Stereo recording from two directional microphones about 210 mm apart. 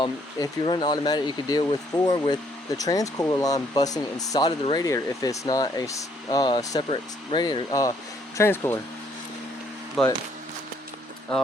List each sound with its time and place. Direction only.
0.0 s speech: 20° left (ahead or behind)
10.0 s speech: centre (ahead or behind)